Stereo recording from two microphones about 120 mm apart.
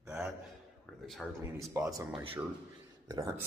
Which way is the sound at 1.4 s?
20° right (ahead or behind).